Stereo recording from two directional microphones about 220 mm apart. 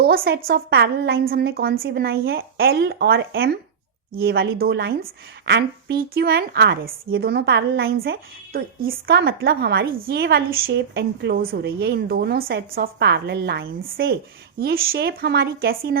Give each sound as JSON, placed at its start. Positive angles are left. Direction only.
{"t": 0.0, "sound": "a woman's voice", "side_deg": -45}